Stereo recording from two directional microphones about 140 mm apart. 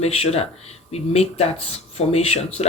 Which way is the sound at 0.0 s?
50° left (ahead or behind).